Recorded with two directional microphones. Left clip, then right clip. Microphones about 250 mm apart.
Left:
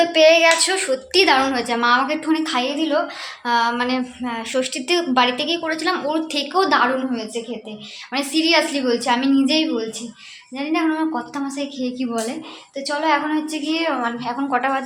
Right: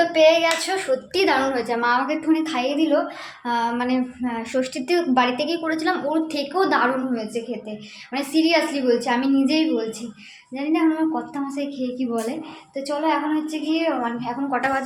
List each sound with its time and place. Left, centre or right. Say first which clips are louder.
0.1 s a woman's voice: left 3 dB; centre